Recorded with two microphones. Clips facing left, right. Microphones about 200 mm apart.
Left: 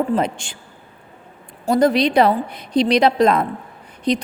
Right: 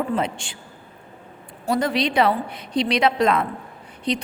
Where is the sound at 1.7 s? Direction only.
40° left (ahead or behind).